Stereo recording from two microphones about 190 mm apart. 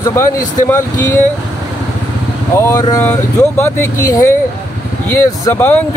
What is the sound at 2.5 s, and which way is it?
Speech, 15° left (ahead or behind).